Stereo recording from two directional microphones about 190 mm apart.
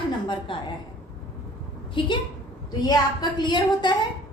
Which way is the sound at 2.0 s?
25° left (ahead or behind).